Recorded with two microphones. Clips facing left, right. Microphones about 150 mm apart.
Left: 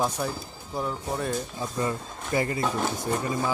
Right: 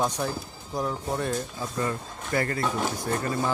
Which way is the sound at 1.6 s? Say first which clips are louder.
Left 1 dB; 20° left (ahead or behind).